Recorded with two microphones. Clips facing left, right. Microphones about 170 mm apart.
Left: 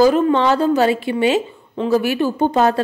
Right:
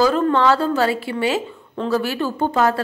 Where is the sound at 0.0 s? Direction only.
15° left (ahead or behind).